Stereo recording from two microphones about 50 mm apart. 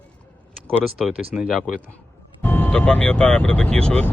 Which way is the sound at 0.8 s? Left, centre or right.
Centre.